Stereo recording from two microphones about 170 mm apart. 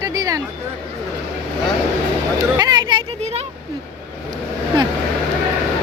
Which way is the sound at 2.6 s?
25° right (ahead or behind).